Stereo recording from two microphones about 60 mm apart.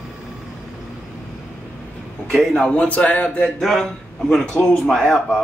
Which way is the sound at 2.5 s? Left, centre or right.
Centre.